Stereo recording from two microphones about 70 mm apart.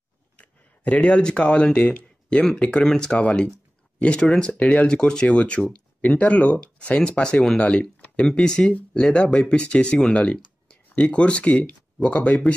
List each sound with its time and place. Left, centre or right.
0.4 s speech: left